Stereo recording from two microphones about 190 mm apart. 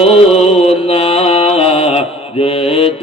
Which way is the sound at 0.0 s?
35° left (ahead or behind).